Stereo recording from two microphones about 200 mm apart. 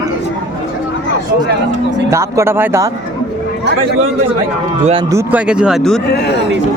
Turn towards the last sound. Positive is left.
turn(degrees=55)  # may be behind; listen again after turning